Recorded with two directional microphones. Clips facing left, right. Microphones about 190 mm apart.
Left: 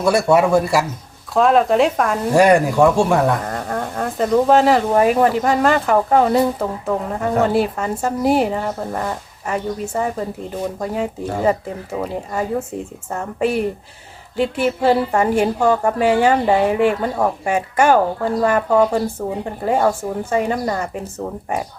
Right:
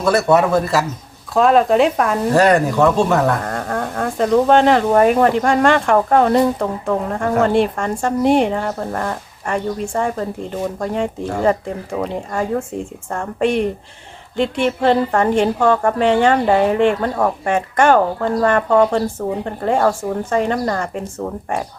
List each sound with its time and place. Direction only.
0.0 s a woman's voice: 10° left (ahead or behind)
1.3 s speech: centre (ahead or behind)
2.3 s a woman's voice: 10° left (ahead or behind)